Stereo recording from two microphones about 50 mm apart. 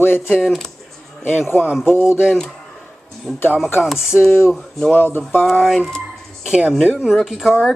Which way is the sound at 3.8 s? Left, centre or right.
Centre.